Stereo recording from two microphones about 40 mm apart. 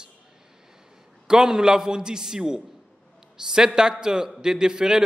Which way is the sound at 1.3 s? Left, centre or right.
Centre.